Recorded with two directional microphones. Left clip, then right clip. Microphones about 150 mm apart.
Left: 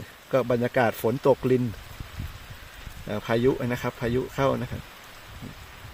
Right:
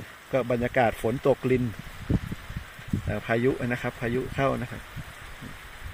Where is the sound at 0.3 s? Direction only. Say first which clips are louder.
Left 2 dB; 25° left (ahead or behind).